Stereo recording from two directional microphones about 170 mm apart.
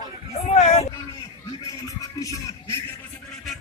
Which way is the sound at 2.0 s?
20° left (ahead or behind).